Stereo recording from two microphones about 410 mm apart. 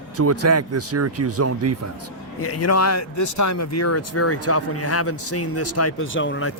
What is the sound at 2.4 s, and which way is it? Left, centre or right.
Speech, left.